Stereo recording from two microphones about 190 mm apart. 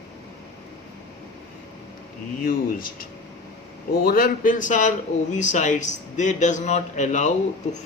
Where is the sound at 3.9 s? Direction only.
50° left (ahead or behind).